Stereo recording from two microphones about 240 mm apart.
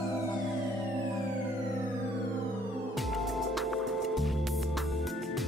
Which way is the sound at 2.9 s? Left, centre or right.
Centre.